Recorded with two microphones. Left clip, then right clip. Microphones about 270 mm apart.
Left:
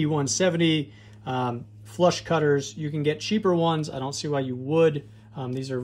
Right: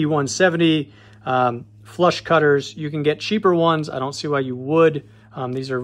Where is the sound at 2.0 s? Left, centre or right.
Right.